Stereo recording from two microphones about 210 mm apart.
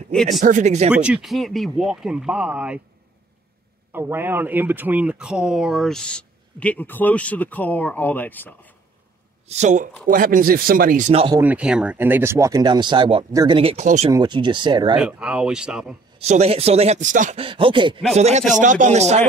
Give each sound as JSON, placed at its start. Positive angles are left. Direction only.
{"t": 0.1, "sound": "speech", "side_deg": 0}
{"t": 0.4, "sound": "speech", "side_deg": -35}
{"t": 0.9, "sound": "speech", "side_deg": -5}
{"t": 3.9, "sound": "speech", "side_deg": -10}
{"t": 9.5, "sound": "speech", "side_deg": -35}
{"t": 11.4, "sound": "speech", "side_deg": -5}
{"t": 14.1, "sound": "speech", "side_deg": -20}
{"t": 15.0, "sound": "speech", "side_deg": -5}
{"t": 16.2, "sound": "speech", "side_deg": -30}